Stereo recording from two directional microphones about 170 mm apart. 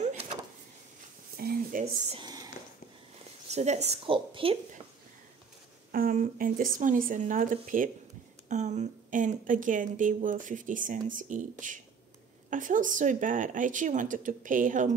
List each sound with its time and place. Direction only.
0.0 s vehicle: 40° right (ahead or behind)
1.3 s a sound: 65° right (ahead or behind)
2.0 s a sound: 25° right (ahead or behind)
3.4 s a woman's voice: 40° right (ahead or behind)
5.9 s a woman's voice: 55° right (ahead or behind)
12.4 s a woman's voice: 50° right (ahead or behind)